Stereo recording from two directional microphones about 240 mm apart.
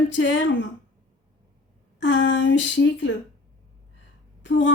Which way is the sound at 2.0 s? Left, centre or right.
Left.